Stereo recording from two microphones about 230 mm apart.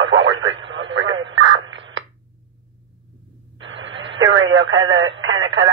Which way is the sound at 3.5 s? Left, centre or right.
Right.